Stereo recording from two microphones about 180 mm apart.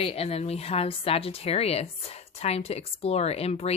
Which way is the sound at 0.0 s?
35° left (ahead or behind).